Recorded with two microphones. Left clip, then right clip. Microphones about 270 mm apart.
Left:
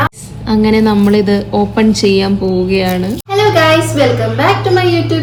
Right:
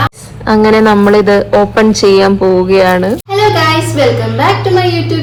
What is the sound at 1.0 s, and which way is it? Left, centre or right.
A woman's voice, right.